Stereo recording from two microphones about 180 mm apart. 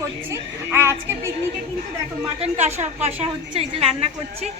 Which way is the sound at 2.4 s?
40° right (ahead or behind).